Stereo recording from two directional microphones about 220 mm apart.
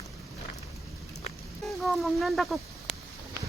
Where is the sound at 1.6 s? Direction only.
Centre (ahead or behind).